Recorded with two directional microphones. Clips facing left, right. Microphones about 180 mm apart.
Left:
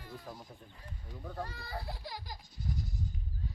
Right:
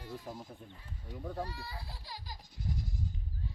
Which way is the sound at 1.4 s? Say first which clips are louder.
Left 2 dB; 50° left (ahead or behind).